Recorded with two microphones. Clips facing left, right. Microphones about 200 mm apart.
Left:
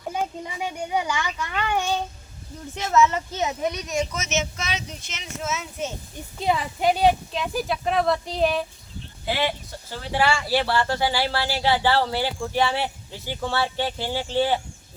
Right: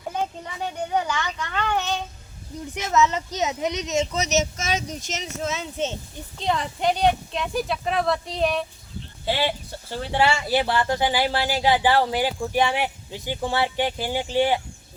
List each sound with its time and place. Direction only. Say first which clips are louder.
0.1 s a child's voice: even; 10° left (ahead or behind)
2.7 s speech: left 1 dB; 20° right (ahead or behind)
4.2 s a child's voice: right 4 dB; 40° right (ahead or behind)
6.4 s speech: left 1 dB; 5° left (ahead or behind)
10.2 s speech: right 1 dB; 20° right (ahead or behind)